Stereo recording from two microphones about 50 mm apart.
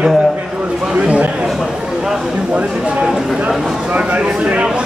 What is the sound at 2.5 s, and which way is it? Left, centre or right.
Speech, right.